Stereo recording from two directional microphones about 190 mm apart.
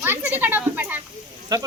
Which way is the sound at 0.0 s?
10° right (ahead or behind).